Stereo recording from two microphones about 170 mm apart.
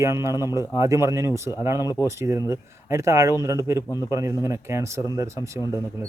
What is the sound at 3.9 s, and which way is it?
Speech, 20° left (ahead or behind).